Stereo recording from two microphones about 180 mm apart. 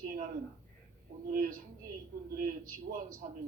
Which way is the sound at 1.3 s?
50° right (ahead or behind).